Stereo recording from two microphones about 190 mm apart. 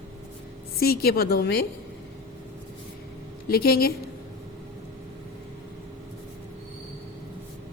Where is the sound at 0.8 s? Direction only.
55° left (ahead or behind).